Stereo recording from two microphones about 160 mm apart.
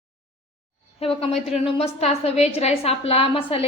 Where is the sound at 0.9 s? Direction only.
40° left (ahead or behind).